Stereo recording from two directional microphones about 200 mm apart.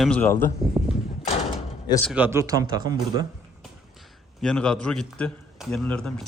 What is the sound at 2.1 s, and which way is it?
A man's voice, 10° right (ahead or behind).